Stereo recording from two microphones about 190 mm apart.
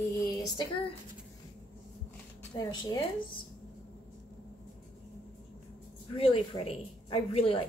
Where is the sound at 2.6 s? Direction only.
20° left (ahead or behind).